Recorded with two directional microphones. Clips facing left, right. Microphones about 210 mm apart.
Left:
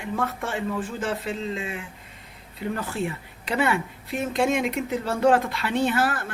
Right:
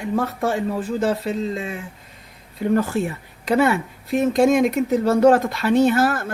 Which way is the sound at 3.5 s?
40° right (ahead or behind).